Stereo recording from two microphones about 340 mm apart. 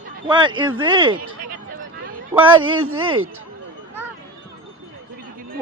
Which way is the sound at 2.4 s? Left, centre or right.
Centre.